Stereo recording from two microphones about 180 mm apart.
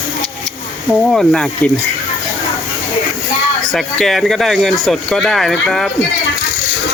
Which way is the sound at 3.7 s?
Centre (ahead or behind).